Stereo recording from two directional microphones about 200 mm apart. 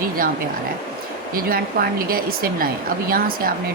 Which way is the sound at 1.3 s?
45° right (ahead or behind).